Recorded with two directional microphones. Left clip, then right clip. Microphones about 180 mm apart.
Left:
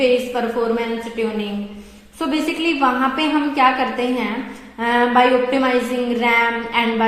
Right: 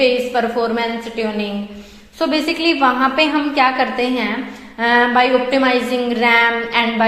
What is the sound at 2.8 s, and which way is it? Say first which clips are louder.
A woman's voice: right 3 dB; 20° right (ahead or behind).